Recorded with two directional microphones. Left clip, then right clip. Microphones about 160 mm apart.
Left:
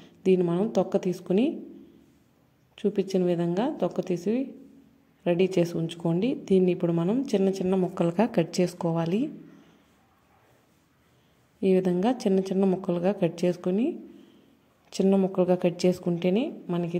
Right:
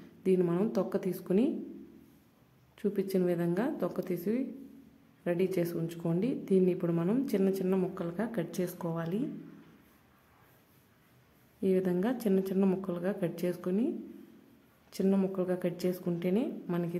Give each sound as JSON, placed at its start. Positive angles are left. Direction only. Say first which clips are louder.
{"t": 0.0, "sound": "a sound", "louder": "left 6 dB", "side_deg": 20}
{"t": 0.5, "sound": "a woman's voice", "louder": "left 6 dB", "side_deg": 15}
{"t": 2.7, "sound": "a woman's voice", "louder": "left 5 dB", "side_deg": 15}
{"t": 7.9, "sound": "a woman's voice", "louder": "left 11 dB", "side_deg": 35}
{"t": 8.5, "sound": "a woman's voice", "louder": "left 9 dB", "side_deg": 25}
{"t": 11.6, "sound": "a woman's voice", "louder": "left 6 dB", "side_deg": 20}
{"t": 16.7, "sound": "a woman's voice", "louder": "left 4 dB", "side_deg": 5}